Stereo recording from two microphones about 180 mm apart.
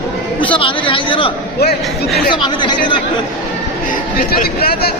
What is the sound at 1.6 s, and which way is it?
Speech, 60° left (ahead or behind).